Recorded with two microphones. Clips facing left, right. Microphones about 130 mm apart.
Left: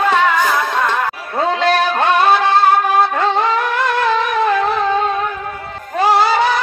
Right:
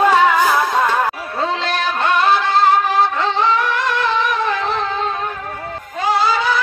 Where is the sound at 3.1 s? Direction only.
50° left (ahead or behind).